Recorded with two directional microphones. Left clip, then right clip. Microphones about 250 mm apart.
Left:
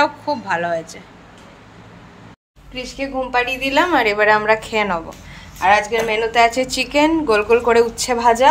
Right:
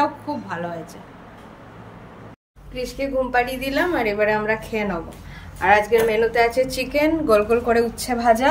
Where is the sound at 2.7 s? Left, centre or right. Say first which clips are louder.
Even; centre.